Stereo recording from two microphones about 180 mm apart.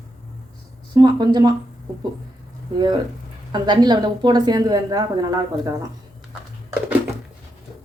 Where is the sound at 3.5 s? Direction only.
25° right (ahead or behind).